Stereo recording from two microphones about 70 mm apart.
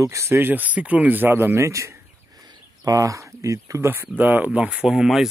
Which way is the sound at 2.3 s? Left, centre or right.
Right.